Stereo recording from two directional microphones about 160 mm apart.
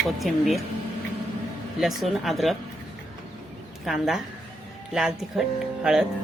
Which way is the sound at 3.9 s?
Centre (ahead or behind).